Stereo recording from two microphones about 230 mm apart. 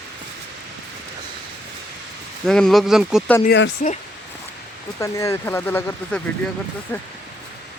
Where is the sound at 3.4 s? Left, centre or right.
Left.